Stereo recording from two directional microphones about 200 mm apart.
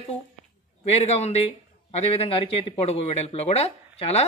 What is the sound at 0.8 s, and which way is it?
A man's voice, 30° left (ahead or behind).